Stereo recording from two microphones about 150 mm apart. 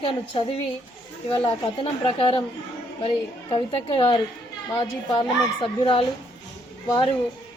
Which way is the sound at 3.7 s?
35° left (ahead or behind).